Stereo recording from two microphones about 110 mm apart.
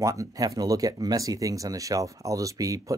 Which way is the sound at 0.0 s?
30° right (ahead or behind).